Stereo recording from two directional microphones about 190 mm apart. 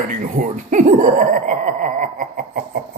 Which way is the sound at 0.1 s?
45° right (ahead or behind).